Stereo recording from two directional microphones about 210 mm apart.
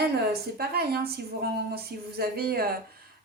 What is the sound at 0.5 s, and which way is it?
A woman's voice, 50° right (ahead or behind).